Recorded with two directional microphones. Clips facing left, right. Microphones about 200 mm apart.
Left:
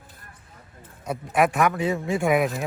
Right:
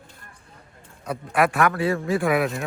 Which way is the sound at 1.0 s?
5° left (ahead or behind).